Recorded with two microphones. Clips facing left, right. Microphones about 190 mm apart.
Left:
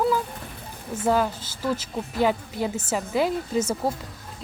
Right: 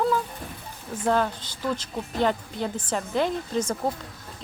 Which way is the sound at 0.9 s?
5° left (ahead or behind).